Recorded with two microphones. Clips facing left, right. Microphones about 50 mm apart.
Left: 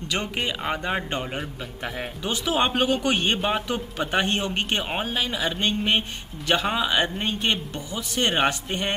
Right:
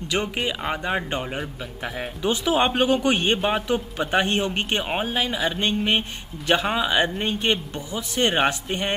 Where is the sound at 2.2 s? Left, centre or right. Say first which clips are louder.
Right 3 dB; centre.